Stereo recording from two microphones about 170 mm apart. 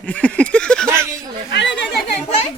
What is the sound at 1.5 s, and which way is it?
Speech, 85° left.